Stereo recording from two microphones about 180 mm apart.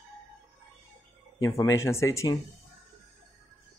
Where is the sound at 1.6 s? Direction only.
15° left (ahead or behind).